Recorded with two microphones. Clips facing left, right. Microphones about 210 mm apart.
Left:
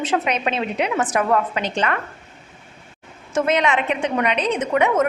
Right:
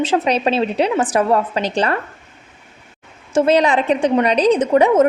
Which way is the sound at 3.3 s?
30° right (ahead or behind).